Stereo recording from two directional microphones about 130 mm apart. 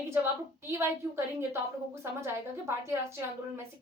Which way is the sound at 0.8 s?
20° right (ahead or behind).